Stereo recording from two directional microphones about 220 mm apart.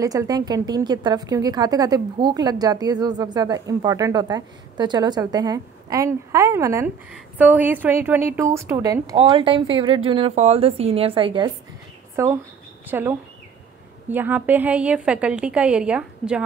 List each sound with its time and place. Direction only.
0.0 s a woman's voice: 15° right (ahead or behind)
14.1 s a woman's voice: 10° right (ahead or behind)